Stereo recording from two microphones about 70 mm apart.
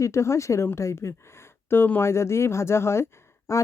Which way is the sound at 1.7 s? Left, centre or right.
Left.